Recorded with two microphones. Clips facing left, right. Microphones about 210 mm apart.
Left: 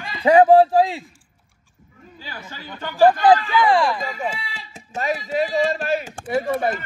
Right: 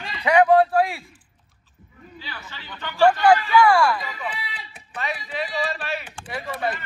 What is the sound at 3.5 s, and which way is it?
Speech, 30° left (ahead or behind).